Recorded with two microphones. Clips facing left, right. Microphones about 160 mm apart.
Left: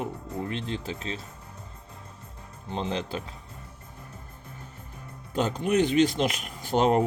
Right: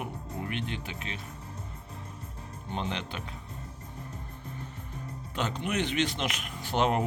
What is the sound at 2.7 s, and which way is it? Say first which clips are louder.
Speech: left 4 dB; 35° left (ahead or behind).